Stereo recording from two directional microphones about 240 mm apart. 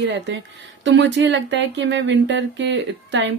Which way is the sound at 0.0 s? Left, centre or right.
Right.